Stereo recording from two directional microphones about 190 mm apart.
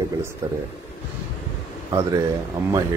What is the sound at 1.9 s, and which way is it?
Speech, 15° right (ahead or behind).